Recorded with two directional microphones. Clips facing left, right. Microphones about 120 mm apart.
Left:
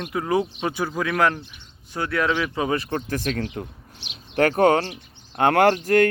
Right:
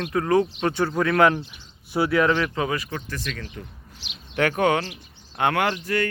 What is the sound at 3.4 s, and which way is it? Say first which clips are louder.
Speech: left 8 dB; 60° left (ahead or behind).